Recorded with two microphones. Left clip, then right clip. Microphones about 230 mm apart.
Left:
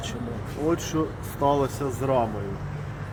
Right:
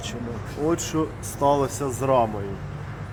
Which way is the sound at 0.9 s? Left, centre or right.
Centre.